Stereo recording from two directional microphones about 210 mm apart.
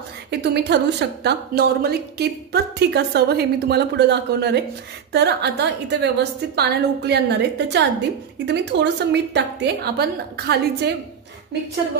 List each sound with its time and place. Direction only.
0.3 s a woman's voice: 50° right (ahead or behind)